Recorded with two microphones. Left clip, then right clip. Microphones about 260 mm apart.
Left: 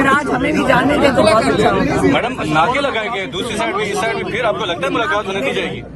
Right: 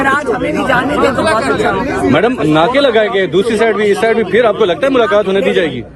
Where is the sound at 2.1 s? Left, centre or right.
Right.